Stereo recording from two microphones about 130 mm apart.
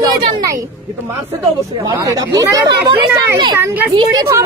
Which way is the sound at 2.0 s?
25° right (ahead or behind).